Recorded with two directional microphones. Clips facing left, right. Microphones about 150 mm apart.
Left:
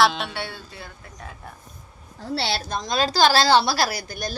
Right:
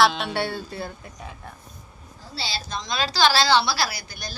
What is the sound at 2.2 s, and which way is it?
A woman's voice, 65° left (ahead or behind).